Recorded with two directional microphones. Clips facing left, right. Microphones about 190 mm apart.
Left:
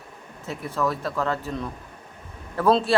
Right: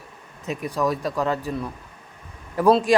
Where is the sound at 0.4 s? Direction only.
15° right (ahead or behind).